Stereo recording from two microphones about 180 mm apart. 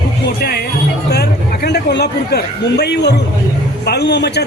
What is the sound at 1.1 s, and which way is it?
A man's voice, 65° left (ahead or behind).